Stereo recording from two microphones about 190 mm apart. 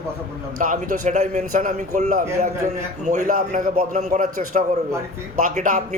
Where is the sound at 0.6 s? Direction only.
45° right (ahead or behind).